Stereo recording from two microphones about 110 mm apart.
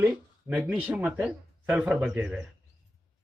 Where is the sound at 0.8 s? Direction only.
10° right (ahead or behind).